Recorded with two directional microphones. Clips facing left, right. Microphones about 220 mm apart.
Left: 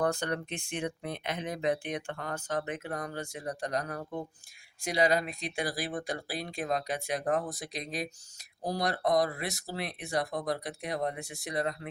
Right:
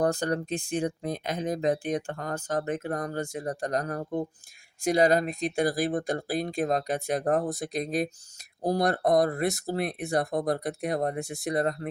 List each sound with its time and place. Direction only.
0.0 s speech: 40° right (ahead or behind)